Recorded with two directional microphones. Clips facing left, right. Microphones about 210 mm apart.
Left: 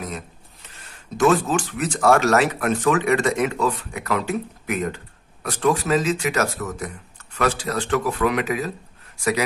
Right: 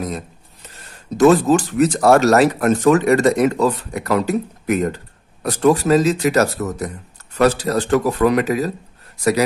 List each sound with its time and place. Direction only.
1.1 s speech: 40° right (ahead or behind)